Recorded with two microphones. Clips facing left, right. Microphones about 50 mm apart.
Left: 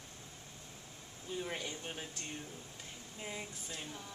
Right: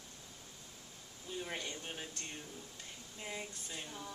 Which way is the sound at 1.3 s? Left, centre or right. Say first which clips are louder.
Left 1 dB; centre.